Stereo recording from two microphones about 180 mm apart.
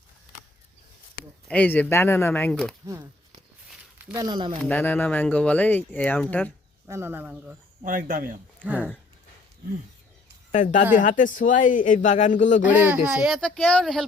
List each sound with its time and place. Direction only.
1.5 s speech: 10° left (ahead or behind)
2.8 s a sound: 20° right (ahead or behind)
4.2 s speech: 25° right (ahead or behind)
4.7 s speech: 10° left (ahead or behind)
6.8 s speech: 15° right (ahead or behind)
7.9 s speech: 45° right (ahead or behind)
8.6 s speech: 10° right (ahead or behind)
10.5 s speech: 45° left (ahead or behind)
12.6 s speech: 10° right (ahead or behind)